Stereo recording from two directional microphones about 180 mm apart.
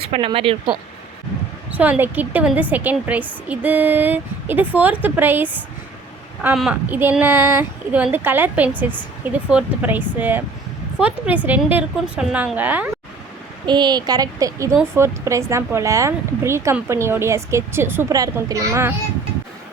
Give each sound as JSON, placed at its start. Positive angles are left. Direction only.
{"t": 0.1, "sound": "speech", "side_deg": -30}
{"t": 1.7, "sound": "speech", "side_deg": -10}
{"t": 13.7, "sound": "speech", "side_deg": -25}